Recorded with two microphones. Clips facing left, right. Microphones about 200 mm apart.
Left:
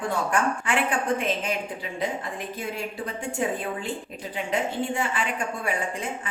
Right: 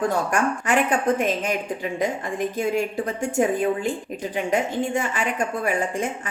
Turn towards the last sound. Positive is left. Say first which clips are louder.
# right 5 dB
turn(degrees=-45)  # may be behind; listen again after turning